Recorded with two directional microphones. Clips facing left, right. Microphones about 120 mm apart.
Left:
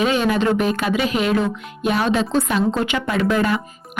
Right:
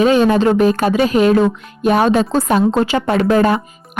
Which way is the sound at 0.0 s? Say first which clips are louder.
Right 6 dB; 35° right (ahead or behind).